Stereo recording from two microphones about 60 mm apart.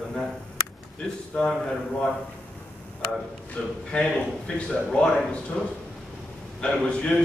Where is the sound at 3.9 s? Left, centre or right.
Centre.